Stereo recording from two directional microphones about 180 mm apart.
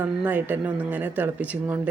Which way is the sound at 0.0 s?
10° right (ahead or behind).